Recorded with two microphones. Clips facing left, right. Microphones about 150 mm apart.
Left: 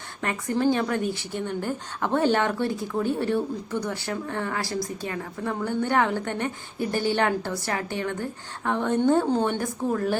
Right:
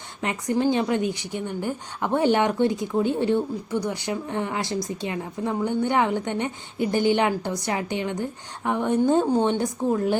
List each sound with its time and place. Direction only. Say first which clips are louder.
0.2 s a woman's voice: right 1 dB; 15° right (ahead or behind)